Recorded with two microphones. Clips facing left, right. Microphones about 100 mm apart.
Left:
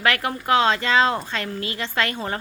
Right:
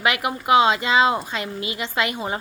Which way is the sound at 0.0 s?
15° right (ahead or behind).